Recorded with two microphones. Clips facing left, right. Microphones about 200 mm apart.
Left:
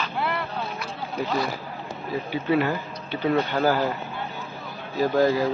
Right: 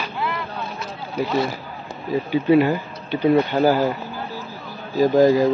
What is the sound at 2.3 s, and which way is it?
Speech, 15° right (ahead or behind).